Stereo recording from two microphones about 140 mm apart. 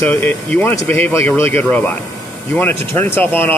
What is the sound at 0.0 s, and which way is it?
Speech, 15° left (ahead or behind).